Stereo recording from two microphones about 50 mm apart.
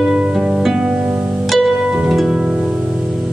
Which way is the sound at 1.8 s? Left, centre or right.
Centre.